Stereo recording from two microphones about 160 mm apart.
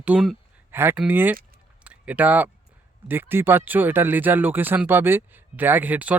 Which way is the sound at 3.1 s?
15° right (ahead or behind).